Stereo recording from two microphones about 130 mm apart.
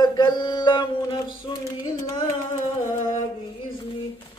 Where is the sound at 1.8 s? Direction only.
25° left (ahead or behind).